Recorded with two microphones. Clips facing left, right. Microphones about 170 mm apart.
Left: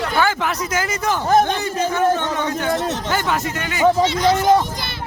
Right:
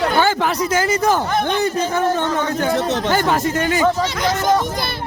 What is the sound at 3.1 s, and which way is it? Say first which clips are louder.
Speech: right 5 dB; 35° right (ahead or behind).